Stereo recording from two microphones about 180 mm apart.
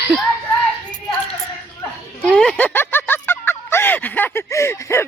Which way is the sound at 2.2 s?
5° left (ahead or behind).